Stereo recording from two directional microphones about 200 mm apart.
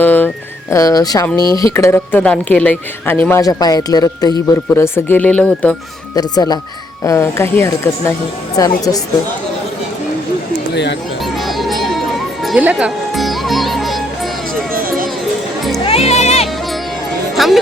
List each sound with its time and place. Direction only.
0.0 s a sound: 10° left (ahead or behind)
0.7 s speech: 20° left (ahead or behind)
6.1 s speech: 20° left (ahead or behind)
11.3 s music: centre (ahead or behind)
14.7 s music: 45° right (ahead or behind)
15.9 s music: 30° left (ahead or behind)
17.3 s music: centre (ahead or behind)